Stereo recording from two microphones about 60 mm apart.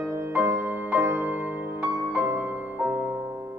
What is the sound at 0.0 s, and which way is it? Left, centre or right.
Music, right.